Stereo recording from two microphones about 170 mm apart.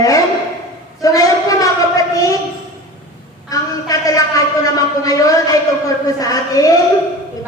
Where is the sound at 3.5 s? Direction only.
20° left (ahead or behind).